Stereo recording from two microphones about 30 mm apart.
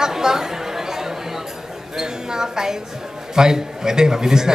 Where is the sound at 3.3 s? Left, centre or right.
Centre.